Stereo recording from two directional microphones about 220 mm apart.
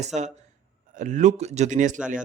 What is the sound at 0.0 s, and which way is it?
Speech, 30° right (ahead or behind).